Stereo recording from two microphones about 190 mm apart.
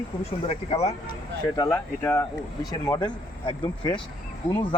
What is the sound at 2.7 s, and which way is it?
Speech, 20° left (ahead or behind).